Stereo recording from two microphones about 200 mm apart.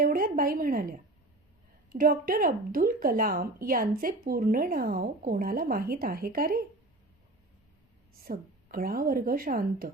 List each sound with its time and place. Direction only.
0.0 s speech: 45° right (ahead or behind)
8.2 s speech: 45° right (ahead or behind)